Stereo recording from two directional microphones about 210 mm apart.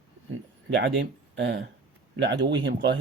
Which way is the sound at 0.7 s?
55° right (ahead or behind).